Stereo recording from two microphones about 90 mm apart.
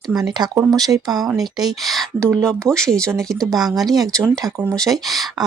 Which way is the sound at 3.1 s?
35° right (ahead or behind).